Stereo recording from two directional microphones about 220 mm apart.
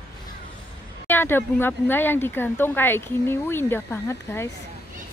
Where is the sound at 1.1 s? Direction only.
10° left (ahead or behind).